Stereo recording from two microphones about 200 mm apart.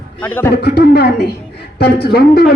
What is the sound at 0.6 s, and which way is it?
A man's voice, 55° left (ahead or behind).